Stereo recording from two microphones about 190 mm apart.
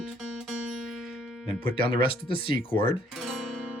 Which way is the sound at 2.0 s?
30° left (ahead or behind).